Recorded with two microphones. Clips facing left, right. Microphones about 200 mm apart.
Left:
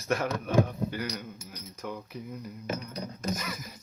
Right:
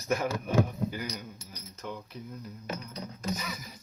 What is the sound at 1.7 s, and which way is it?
Speech, 10° left (ahead or behind).